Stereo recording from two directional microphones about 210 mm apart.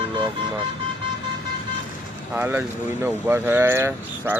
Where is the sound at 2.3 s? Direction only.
10° right (ahead or behind).